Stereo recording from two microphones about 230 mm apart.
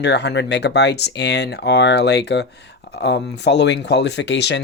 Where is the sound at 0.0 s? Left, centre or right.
Left.